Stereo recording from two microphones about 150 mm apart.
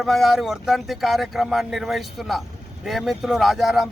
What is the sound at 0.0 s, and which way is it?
Speech, centre (ahead or behind).